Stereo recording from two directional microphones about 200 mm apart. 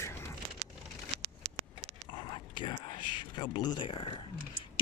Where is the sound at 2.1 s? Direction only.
25° left (ahead or behind).